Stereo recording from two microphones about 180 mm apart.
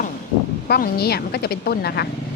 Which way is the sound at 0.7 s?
60° left (ahead or behind).